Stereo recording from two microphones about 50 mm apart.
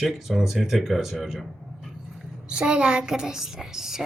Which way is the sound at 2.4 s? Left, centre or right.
Centre.